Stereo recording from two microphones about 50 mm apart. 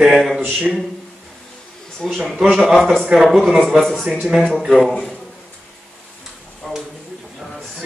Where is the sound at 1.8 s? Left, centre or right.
Centre.